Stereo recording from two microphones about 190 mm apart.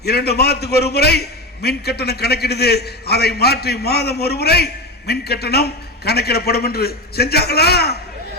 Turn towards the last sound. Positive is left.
turn(degrees=55)  # may be behind; listen again after turning